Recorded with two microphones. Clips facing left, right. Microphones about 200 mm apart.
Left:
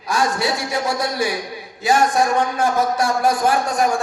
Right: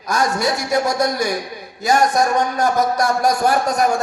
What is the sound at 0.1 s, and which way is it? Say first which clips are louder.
A man's voice: right 1 dB; 45° right (ahead or behind).